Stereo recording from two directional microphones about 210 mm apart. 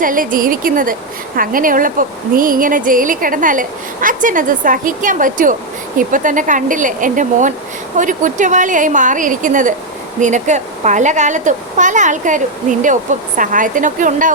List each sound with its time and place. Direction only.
0.0 s a woman's voice: 40° right (ahead or behind)